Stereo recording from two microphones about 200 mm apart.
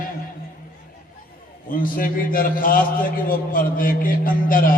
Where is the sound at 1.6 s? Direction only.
45° left (ahead or behind).